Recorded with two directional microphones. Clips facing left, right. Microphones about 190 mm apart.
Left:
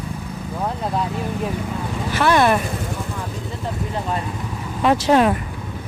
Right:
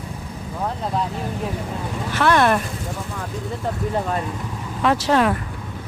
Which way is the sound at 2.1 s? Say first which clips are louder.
Left 1 dB; 10° left (ahead or behind).